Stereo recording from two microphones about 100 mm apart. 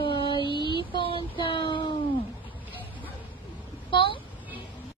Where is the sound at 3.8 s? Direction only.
55° left (ahead or behind).